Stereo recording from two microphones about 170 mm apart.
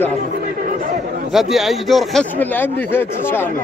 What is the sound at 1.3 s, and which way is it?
Speech, centre (ahead or behind).